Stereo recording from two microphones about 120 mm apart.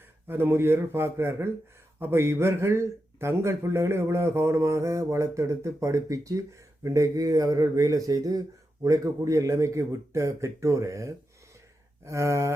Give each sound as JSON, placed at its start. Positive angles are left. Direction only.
{"t": 0.3, "sound": "speech", "side_deg": -20}